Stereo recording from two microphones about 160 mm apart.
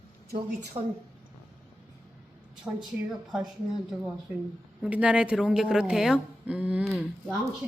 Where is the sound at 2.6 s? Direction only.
Centre (ahead or behind).